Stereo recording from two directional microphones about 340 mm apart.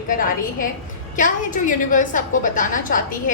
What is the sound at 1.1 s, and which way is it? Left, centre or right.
A woman's voice, left.